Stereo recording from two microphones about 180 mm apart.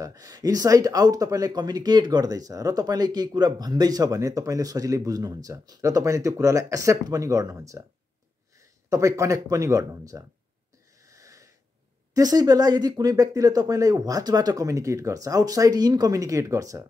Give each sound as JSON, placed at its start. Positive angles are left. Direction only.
{"t": 0.0, "sound": "speech", "side_deg": -20}
{"t": 8.9, "sound": "speech", "side_deg": -20}
{"t": 11.0, "sound": "wheeze", "side_deg": -20}
{"t": 12.1, "sound": "speech", "side_deg": -20}